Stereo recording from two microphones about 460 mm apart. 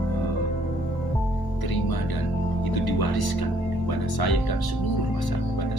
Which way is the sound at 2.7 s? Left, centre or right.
Left.